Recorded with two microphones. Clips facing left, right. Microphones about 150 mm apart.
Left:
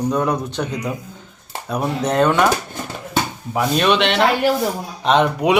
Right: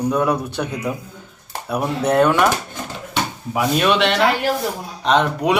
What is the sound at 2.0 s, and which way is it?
Speech, 10° right (ahead or behind).